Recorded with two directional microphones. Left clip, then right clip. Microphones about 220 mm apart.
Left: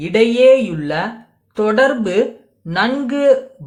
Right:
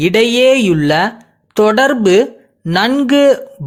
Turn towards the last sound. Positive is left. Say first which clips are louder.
# right 4 dB
turn(degrees=-40)  # may be behind; listen again after turning